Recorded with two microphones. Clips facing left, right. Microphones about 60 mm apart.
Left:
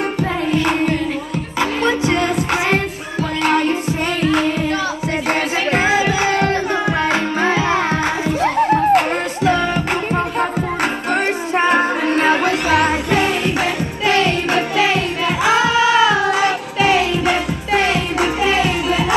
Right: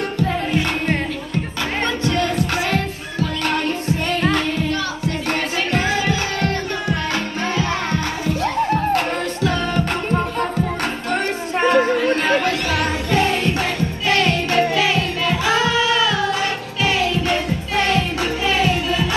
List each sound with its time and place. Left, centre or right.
2.0 s music: centre
11.7 s music: centre